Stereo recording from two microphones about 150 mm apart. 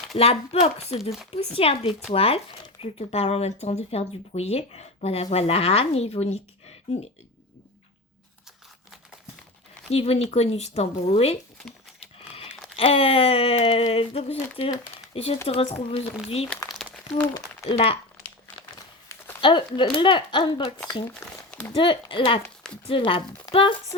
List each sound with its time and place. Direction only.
0.2 s speech: 40° left (ahead or behind)
9.9 s speech: 40° left (ahead or behind)
11.9 s a sound: 40° left (ahead or behind)
12.7 s speech: 40° left (ahead or behind)
16.6 s crumpling: centre (ahead or behind)
17.7 s speech: 40° left (ahead or behind)
19.4 s speech: 30° left (ahead or behind)
21.2 s a sound: 15° left (ahead or behind)
21.8 s speech: 35° left (ahead or behind)
22.4 s a sound: 5° left (ahead or behind)
22.9 s speech: 35° left (ahead or behind)